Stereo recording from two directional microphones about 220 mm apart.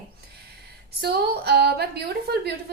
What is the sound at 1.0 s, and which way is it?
A woman's voice, 45° right (ahead or behind).